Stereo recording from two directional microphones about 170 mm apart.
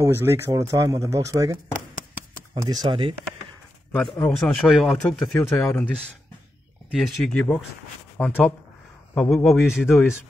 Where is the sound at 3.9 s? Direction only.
5° left (ahead or behind).